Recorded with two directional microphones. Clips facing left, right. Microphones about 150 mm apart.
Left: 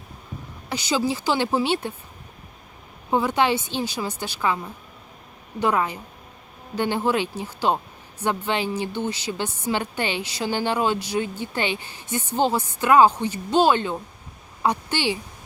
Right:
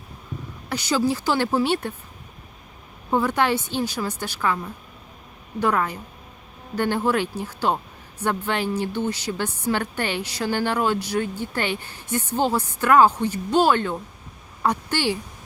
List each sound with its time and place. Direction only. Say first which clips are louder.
0.7 s speech: right 2 dB; 20° left (ahead or behind)
3.1 s speech: even; 15° left (ahead or behind)
13.5 s a woman's voice: left 1 dB; 20° left (ahead or behind)